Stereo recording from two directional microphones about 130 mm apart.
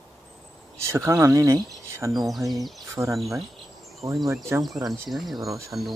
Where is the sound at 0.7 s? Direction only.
20° right (ahead or behind).